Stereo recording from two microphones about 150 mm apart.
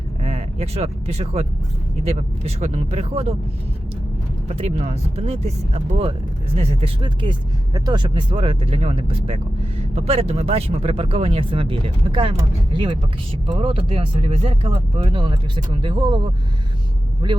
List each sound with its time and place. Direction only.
0.2 s speech: 40° right (ahead or behind)
4.4 s speech: 45° right (ahead or behind)